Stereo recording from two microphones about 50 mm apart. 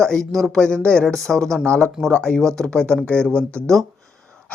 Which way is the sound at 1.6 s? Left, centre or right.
Left.